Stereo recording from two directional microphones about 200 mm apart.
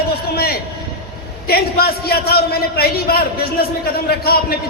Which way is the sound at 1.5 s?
50° left (ahead or behind).